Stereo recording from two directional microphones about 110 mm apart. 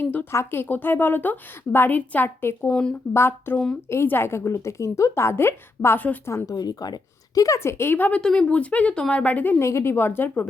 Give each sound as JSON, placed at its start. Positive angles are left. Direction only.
{"t": 0.0, "sound": "a sound", "side_deg": 15}
{"t": 0.3, "sound": "a woman's voice", "side_deg": 20}
{"t": 3.1, "sound": "a woman's voice", "side_deg": 20}
{"t": 6.3, "sound": "a woman's voice", "side_deg": 35}